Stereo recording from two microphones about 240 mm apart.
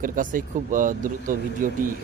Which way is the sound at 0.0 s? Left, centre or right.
Right.